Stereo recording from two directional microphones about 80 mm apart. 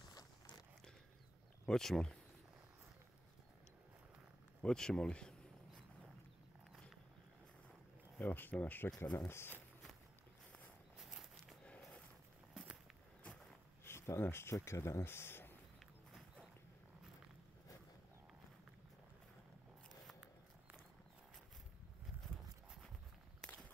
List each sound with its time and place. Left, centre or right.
0.1 s zipper: left
1.7 s speech: centre
4.6 s speech: centre
8.2 s speech: left
9.3 s speech: left
11.1 s a sound: centre
13.8 s speech: left
16.1 s a sound: centre